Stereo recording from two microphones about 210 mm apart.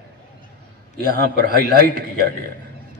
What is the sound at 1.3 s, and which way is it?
Speech, 45° right (ahead or behind).